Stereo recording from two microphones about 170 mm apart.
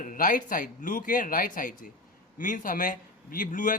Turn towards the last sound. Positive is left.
turn(degrees=50)  # may be behind; listen again after turning